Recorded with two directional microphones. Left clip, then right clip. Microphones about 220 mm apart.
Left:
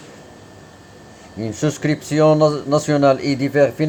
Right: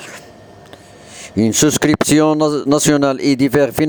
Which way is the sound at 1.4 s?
50° right (ahead or behind).